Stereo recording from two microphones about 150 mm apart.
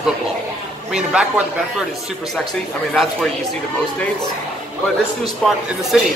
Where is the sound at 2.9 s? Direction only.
Centre (ahead or behind).